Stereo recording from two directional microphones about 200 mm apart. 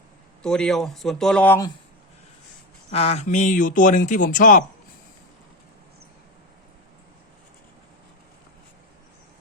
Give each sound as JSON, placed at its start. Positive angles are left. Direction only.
{"t": 0.4, "sound": "speech", "side_deg": 5}
{"t": 2.9, "sound": "speech", "side_deg": 30}